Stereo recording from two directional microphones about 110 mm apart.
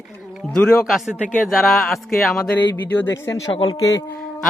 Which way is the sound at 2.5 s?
20° left (ahead or behind).